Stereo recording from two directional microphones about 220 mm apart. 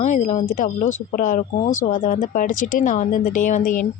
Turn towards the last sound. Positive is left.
turn(degrees=35)  # may be behind; listen again after turning